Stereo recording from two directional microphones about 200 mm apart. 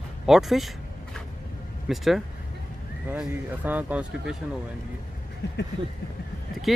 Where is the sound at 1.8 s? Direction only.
Centre (ahead or behind).